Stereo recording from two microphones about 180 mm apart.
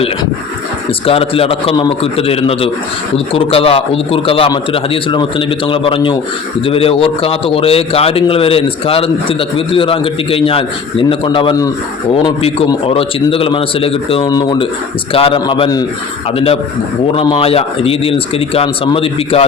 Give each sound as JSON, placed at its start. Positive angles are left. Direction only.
{"t": 1.0, "sound": "a man's voice", "side_deg": 30}
{"t": 17.2, "sound": "a man's voice", "side_deg": 30}